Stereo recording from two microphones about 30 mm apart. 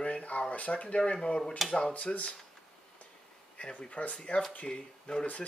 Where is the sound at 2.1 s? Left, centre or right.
Left.